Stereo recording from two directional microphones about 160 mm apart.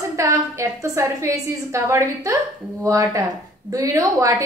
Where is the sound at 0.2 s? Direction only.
20° right (ahead or behind).